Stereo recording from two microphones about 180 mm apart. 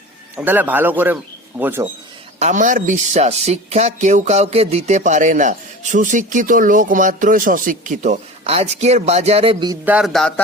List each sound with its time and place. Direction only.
0.3 s speech: 10° right (ahead or behind)
2.4 s speech: 45° right (ahead or behind)
9.8 s speech: 5° right (ahead or behind)
10.1 s speech: 5° left (ahead or behind)